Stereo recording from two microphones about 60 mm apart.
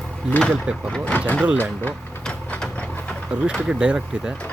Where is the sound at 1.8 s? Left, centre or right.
Left.